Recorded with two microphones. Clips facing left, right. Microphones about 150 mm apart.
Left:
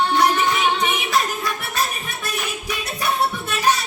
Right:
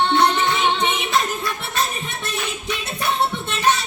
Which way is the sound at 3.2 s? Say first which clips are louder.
Right 1 dB; 25° right (ahead or behind).